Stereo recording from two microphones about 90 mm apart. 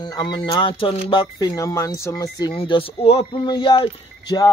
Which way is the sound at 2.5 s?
80° left.